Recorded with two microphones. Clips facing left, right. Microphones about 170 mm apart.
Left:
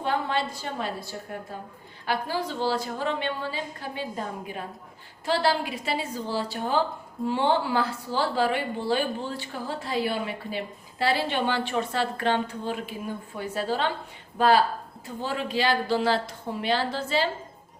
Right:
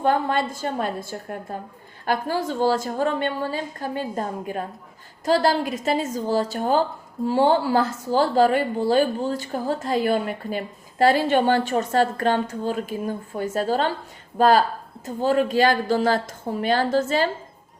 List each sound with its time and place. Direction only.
0.0 s speech: 50° right (ahead or behind)